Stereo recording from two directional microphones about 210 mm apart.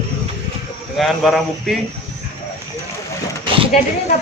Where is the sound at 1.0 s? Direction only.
Centre (ahead or behind).